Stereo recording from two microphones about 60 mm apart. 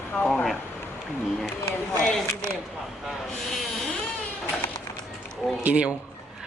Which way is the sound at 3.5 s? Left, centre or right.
Centre.